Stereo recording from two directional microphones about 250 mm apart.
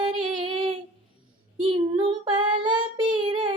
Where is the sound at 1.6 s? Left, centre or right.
Right.